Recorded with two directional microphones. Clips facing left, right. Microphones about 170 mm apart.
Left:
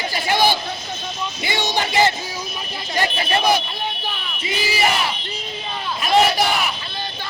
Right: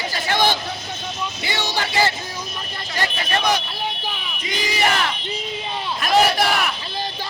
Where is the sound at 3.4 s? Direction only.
10° left (ahead or behind).